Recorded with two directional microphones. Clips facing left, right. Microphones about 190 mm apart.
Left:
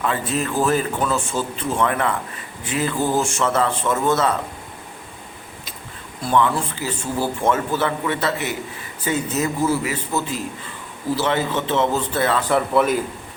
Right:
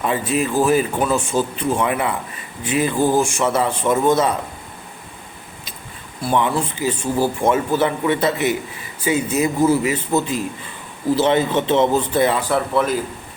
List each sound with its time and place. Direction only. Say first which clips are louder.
0.0 s speech: right 3 dB; 15° right (ahead or behind)
6.2 s a man's voice: even; 15° right (ahead or behind)
12.5 s speech: left 1 dB; centre (ahead or behind)